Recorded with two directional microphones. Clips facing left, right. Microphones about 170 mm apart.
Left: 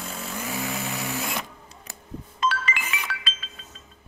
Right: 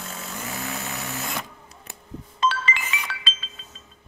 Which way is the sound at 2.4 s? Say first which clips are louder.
Right 2 dB; 25° right (ahead or behind).